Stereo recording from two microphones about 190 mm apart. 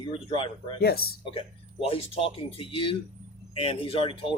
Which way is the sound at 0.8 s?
55° left (ahead or behind).